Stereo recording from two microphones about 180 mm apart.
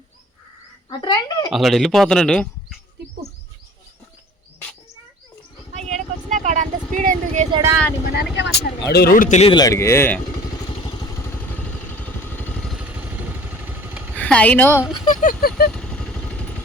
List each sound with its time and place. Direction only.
0.9 s speech: 20° left (ahead or behind)
1.5 s speech: centre (ahead or behind)
5.7 s vehicle: 40° right (ahead or behind)
7.8 s speech: 10° left (ahead or behind)
8.0 s speech: 65° left (ahead or behind)
9.4 s speech: 25° left (ahead or behind)
10.8 s vehicle: 15° left (ahead or behind)
12.7 s vehicle: 5° right (ahead or behind)
14.2 s a woman's voice: 5° left (ahead or behind)
15.1 s vehicle: 45° left (ahead or behind)
15.7 s vehicle: 5° left (ahead or behind)